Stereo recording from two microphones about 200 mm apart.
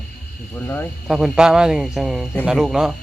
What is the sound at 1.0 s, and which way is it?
Speech, centre (ahead or behind).